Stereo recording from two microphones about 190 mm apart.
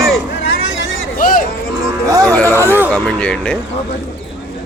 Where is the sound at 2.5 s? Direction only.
10° right (ahead or behind).